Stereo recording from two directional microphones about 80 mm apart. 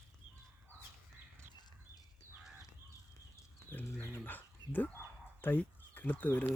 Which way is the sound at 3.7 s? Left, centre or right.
Left.